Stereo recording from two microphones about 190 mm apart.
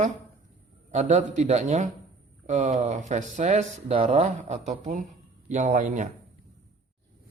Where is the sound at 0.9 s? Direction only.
35° right (ahead or behind).